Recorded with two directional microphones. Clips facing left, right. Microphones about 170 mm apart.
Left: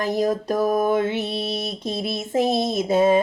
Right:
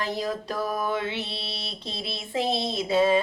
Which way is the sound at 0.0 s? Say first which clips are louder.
Left 7 dB; 45° left (ahead or behind).